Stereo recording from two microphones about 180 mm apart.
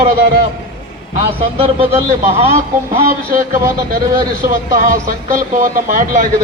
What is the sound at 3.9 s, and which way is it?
A man's voice, 50° right (ahead or behind).